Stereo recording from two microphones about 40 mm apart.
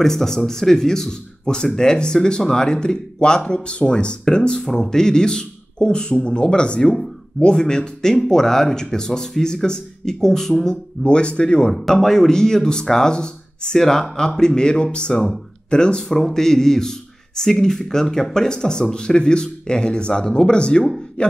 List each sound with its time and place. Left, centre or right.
0.0 s speech: centre
4.2 s speech: centre
11.8 s speech: centre